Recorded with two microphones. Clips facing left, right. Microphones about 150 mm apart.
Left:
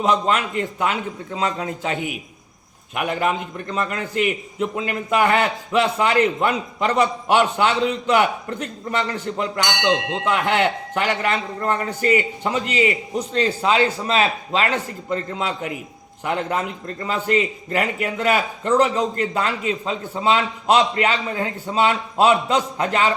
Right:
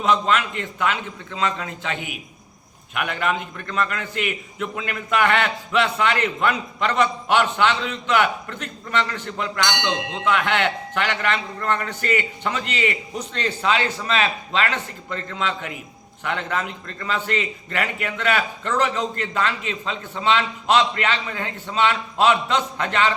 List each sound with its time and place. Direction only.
0.0 s a man's voice: 35° left (ahead or behind)